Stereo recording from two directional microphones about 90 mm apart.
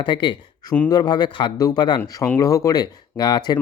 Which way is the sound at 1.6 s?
50° left (ahead or behind).